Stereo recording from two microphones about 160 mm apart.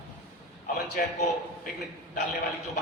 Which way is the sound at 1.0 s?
60° left (ahead or behind).